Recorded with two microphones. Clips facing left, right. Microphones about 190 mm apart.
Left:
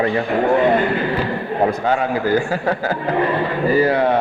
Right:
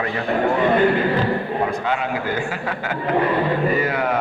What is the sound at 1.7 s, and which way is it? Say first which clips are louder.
A man's voice: left 4 dB; 40° left (ahead or behind).